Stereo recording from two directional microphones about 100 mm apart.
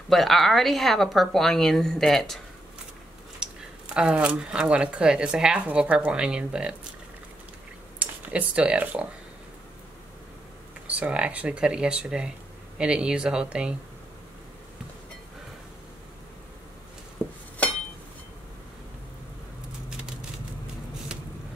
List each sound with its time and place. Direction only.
0.1 s a woman's voice: centre (ahead or behind)
3.4 s a sound: 5° right (ahead or behind)
3.9 s speech: 10° right (ahead or behind)
8.0 s speech: 10° right (ahead or behind)
10.9 s speech: 10° right (ahead or behind)
17.6 s a sound: 15° left (ahead or behind)